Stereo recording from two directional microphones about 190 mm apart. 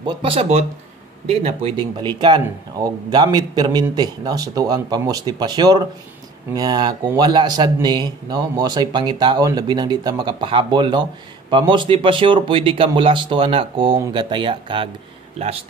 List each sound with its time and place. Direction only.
0.0 s a man's voice: 30° right (ahead or behind)